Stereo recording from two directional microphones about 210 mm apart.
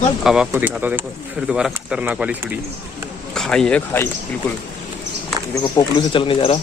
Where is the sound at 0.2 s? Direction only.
5° right (ahead or behind).